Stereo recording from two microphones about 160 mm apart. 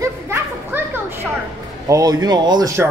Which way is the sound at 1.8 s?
20° right (ahead or behind).